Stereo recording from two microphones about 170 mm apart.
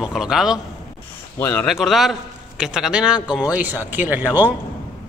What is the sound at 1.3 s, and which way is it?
Speech, 15° left (ahead or behind).